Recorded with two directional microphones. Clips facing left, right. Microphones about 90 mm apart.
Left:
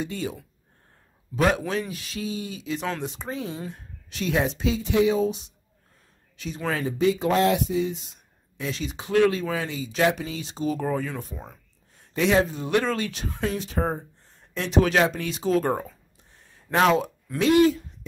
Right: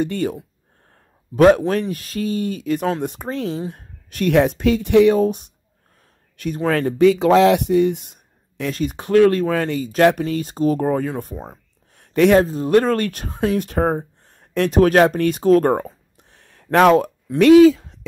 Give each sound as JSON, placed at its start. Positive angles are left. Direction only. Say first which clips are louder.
{"t": 0.0, "sound": "speech", "louder": "right 9 dB", "side_deg": -55}
{"t": 11.3, "sound": "speech", "louder": "right 8 dB", "side_deg": -35}
{"t": 11.9, "sound": "a sound", "louder": "right 8 dB", "side_deg": -60}
{"t": 12.4, "sound": "speech", "louder": "right 8 dB", "side_deg": -40}
{"t": 16.2, "sound": "a sound", "louder": "right 4 dB", "side_deg": -70}
{"t": 16.6, "sound": "speech", "louder": "right 7 dB", "side_deg": -55}
{"t": 17.4, "sound": "speech", "louder": "right 9 dB", "side_deg": -85}